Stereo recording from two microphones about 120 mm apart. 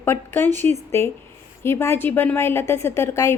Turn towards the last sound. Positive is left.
turn(degrees=25)  # may be behind; listen again after turning